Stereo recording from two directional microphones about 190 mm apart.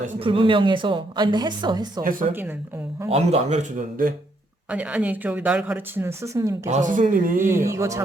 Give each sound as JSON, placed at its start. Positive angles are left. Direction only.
{"t": 0.2, "sound": "a woman's voice", "side_deg": -25}
{"t": 2.0, "sound": "speech", "side_deg": -50}
{"t": 3.1, "sound": "a man's voice", "side_deg": -35}
{"t": 4.7, "sound": "speech", "side_deg": -5}
{"t": 6.7, "sound": "speech", "side_deg": -40}
{"t": 7.7, "sound": "speech", "side_deg": -15}